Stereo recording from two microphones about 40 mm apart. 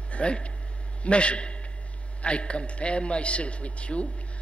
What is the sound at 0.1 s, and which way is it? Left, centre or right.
A man's voice, left.